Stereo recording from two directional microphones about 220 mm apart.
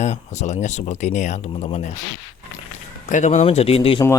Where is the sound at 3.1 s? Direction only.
35° left (ahead or behind).